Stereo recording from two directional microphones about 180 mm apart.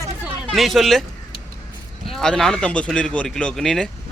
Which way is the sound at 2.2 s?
5° left (ahead or behind).